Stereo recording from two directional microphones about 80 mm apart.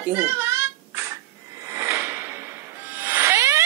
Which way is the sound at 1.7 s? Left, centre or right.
Right.